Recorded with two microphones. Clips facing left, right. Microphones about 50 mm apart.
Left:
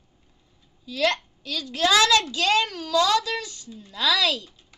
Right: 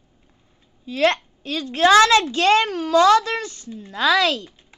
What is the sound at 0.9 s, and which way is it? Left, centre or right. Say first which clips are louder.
A woman's voice: right 5 dB; right.